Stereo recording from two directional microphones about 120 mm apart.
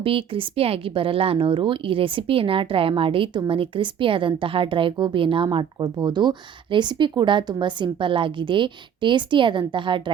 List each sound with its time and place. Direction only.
0.0 s a woman's voice: 50° right (ahead or behind)